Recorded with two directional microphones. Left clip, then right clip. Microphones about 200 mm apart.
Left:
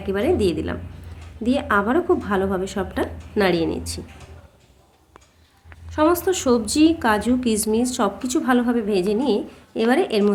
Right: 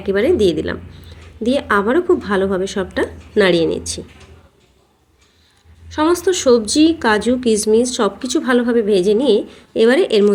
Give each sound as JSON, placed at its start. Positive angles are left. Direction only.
{"t": 0.0, "sound": "speech", "side_deg": -10}
{"t": 5.9, "sound": "speech", "side_deg": -5}